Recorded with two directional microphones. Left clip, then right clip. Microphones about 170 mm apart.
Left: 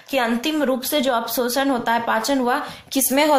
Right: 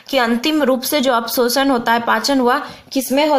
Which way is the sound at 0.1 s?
40° right (ahead or behind).